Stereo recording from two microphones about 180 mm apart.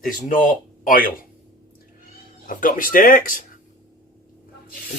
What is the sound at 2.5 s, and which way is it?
Speech, 50° left (ahead or behind).